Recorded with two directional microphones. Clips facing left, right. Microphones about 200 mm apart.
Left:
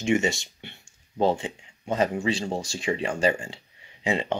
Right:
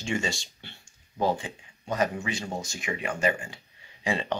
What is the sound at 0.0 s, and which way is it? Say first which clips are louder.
Speech: left 7 dB; 20° left (ahead or behind).